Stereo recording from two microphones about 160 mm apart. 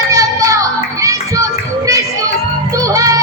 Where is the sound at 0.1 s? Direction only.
20° right (ahead or behind).